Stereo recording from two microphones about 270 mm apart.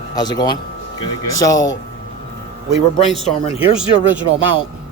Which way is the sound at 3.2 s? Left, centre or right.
Left.